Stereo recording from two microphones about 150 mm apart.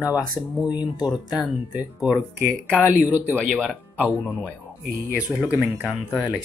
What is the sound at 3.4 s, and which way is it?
Speech, centre (ahead or behind).